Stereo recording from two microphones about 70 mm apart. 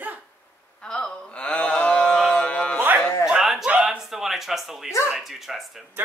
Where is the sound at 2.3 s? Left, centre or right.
Centre.